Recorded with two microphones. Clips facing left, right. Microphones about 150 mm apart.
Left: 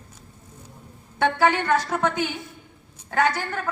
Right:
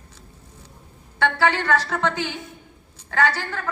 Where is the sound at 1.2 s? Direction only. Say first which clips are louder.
Left 1 dB; 15° left (ahead or behind).